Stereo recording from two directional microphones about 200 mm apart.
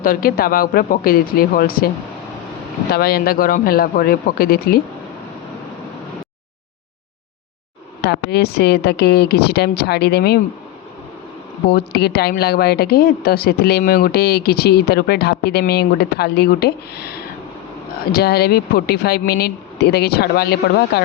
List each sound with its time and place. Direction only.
0.0 s a woman's voice: 45° left (ahead or behind)
2.9 s a woman's voice: 50° left (ahead or behind)
8.0 s a woman's voice: 55° left (ahead or behind)
11.7 s a woman's voice: 55° left (ahead or behind)